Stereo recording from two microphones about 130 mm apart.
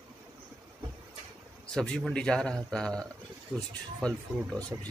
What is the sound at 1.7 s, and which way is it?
A man's voice, 5° left (ahead or behind).